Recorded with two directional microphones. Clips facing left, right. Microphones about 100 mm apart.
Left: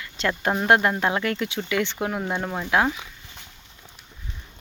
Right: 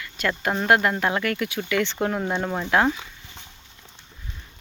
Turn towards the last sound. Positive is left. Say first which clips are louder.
# right 1 dB
turn(degrees=5)  # may be behind; listen again after turning